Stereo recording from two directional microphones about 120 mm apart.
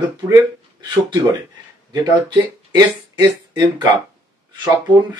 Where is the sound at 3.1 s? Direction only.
35° right (ahead or behind).